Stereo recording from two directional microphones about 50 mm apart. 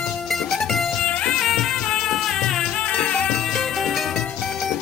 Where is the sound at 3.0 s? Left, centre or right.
Left.